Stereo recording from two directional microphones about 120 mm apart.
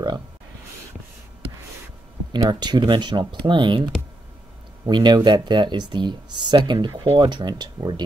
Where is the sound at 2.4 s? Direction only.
35° right (ahead or behind).